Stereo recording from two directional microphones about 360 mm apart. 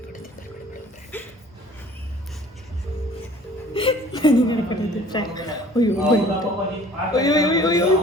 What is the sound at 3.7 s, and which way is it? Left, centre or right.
Chuckle, centre.